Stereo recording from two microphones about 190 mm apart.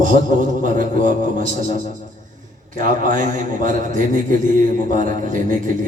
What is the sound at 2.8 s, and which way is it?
A man's voice, 45° right (ahead or behind).